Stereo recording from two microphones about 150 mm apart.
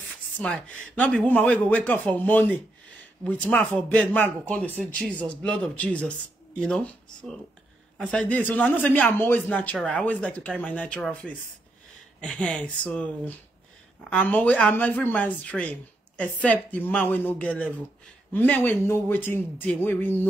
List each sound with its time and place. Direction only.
0.4 s speech: 5° left (ahead or behind)